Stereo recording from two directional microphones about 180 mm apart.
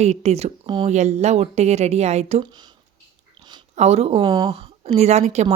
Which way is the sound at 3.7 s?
35° right (ahead or behind).